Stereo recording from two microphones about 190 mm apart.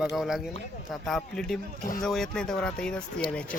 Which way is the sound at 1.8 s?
45° left (ahead or behind).